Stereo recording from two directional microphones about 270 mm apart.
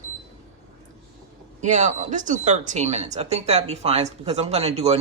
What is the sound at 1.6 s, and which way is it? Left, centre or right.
Speech, right.